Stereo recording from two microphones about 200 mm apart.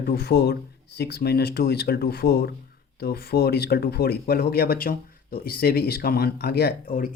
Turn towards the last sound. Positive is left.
turn(degrees=50)  # may be behind; listen again after turning